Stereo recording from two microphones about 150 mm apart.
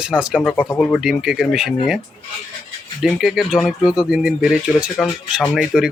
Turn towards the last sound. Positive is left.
turn(degrees=-5)  # may be behind; listen again after turning